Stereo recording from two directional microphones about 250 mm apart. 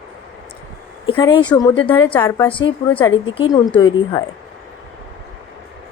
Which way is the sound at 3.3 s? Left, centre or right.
Centre.